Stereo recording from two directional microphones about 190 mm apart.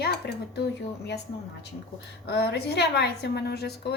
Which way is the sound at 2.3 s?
60° left (ahead or behind).